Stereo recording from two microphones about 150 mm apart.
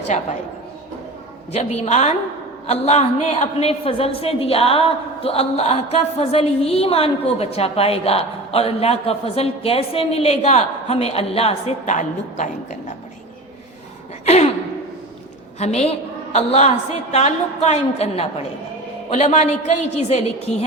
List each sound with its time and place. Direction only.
1.5 s a woman's voice: 45° left (ahead or behind)
14.3 s speech: 45° left (ahead or behind)
15.5 s a woman's voice: 45° left (ahead or behind)